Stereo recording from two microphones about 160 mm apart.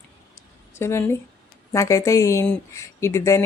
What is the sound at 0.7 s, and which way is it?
Speech, 15° left (ahead or behind).